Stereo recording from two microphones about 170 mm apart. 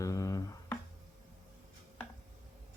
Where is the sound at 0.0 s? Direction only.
20° left (ahead or behind).